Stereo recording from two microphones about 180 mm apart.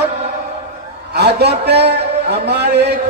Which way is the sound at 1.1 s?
65° right (ahead or behind).